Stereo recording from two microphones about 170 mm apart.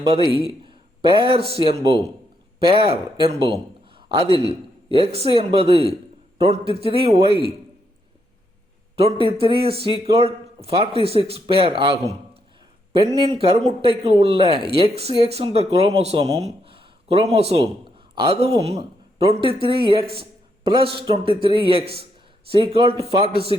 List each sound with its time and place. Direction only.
0.0 s a man's voice: 25° right (ahead or behind)
9.2 s speech: 30° right (ahead or behind)